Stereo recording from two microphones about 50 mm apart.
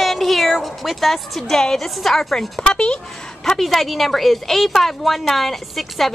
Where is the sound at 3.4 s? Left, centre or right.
Centre.